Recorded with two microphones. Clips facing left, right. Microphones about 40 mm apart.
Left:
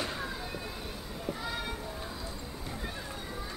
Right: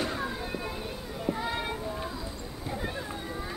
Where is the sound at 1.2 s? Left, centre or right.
Right.